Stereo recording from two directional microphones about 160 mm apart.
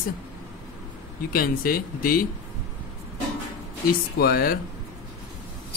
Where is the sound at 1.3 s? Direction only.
65° left (ahead or behind).